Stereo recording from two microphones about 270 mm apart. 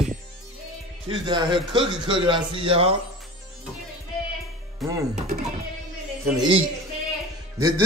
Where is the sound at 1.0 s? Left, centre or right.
Centre.